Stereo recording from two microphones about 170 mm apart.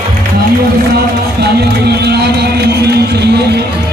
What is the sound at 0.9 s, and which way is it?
Music, 75° right (ahead or behind).